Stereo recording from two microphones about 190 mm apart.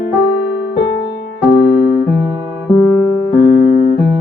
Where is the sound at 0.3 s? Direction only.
75° left (ahead or behind).